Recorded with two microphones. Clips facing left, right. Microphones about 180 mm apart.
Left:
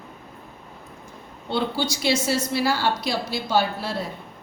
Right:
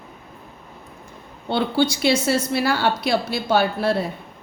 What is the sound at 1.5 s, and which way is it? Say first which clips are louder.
A woman's voice: right 5 dB; 60° right (ahead or behind).